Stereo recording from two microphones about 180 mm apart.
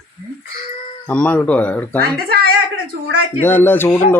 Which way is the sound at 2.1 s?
60° right (ahead or behind).